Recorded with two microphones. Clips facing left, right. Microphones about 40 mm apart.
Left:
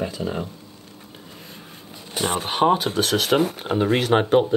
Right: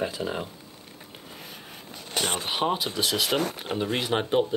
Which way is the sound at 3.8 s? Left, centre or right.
Left.